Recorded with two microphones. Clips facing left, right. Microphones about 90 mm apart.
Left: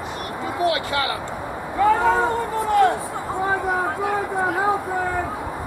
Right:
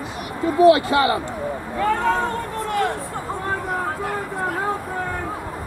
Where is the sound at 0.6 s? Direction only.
30° right (ahead or behind).